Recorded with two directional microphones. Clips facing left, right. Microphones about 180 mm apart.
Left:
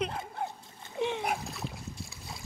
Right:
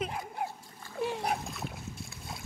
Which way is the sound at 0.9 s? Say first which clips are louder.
Left 1 dB; 5° right (ahead or behind).